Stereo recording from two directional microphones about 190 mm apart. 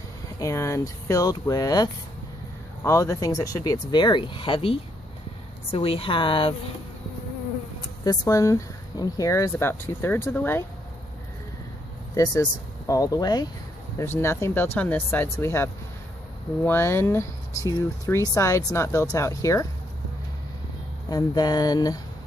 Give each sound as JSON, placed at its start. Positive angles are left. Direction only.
{"t": 0.4, "sound": "speech", "side_deg": 15}
{"t": 8.0, "sound": "speech", "side_deg": 20}
{"t": 12.1, "sound": "speech", "side_deg": 15}
{"t": 21.1, "sound": "speech", "side_deg": 20}